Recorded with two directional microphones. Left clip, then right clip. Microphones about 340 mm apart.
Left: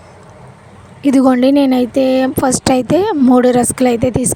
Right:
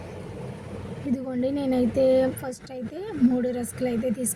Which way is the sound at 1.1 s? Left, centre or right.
Left.